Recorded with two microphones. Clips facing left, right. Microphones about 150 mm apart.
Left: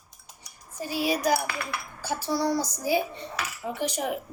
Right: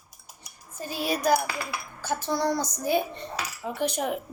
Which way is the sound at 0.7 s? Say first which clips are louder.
Left 2 dB; 10° left (ahead or behind).